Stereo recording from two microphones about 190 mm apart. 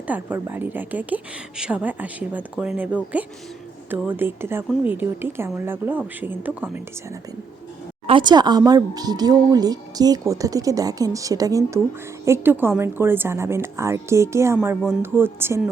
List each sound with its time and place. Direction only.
0.1 s a woman's voice: 10° right (ahead or behind)
8.0 s a woman's voice: 25° right (ahead or behind)